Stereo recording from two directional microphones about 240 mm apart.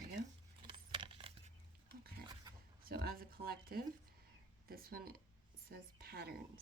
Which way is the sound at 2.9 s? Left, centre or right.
Right.